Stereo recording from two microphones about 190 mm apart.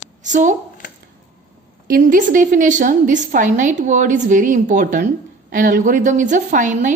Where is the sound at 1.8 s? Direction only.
50° right (ahead or behind).